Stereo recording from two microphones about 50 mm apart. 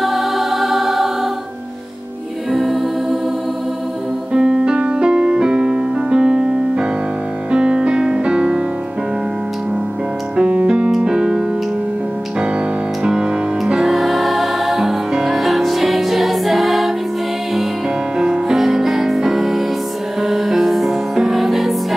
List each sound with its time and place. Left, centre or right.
0.0 s music: centre
2.5 s music: centre
4.3 s music: centre
10.3 s music: right
10.9 s piano: centre
13.0 s music: centre
18.2 s music: centre